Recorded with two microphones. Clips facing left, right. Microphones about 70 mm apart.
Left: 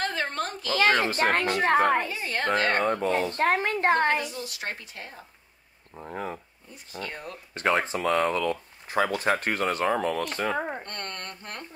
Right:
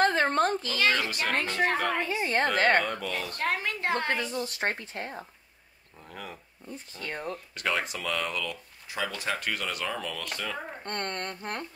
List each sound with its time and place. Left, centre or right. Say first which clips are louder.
0.0 s a sound: right 6 dB; right
0.7 s speech: left 4 dB; left
2.0 s speech: right 3 dB; right
2.8 s speech: left 7 dB; left
4.2 s speech: right 3 dB; right
5.9 s speech: left 8 dB; left
7.1 s speech: right 7 dB; right
7.5 s speech: left 7 dB; left
10.9 s speech: right 4 dB; right